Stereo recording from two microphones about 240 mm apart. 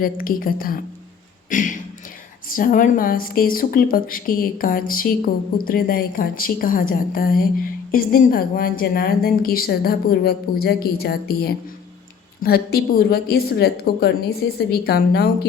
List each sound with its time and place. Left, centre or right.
0.0 s speech: left